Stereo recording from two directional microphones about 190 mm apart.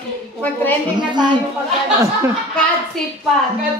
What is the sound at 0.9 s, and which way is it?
Speech, 25° right (ahead or behind).